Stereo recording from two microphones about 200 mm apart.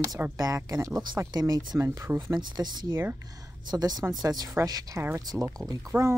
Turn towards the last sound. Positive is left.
turn(degrees=-15)  # may be behind; listen again after turning